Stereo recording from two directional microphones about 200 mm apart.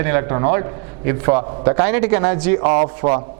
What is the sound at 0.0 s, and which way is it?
A man's voice, 15° right (ahead or behind).